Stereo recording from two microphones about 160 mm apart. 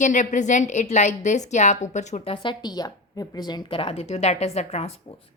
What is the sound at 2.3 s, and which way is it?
A woman's voice, 30° left (ahead or behind).